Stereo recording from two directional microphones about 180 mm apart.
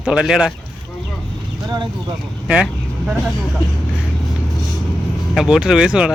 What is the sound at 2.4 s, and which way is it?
Vehicle, 5° right (ahead or behind).